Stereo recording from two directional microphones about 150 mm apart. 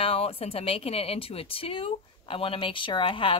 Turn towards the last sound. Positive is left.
turn(degrees=35)  # may be behind; listen again after turning